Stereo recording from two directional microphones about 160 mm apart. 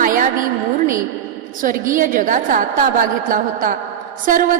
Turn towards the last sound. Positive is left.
turn(degrees=-60)  # may be behind; listen again after turning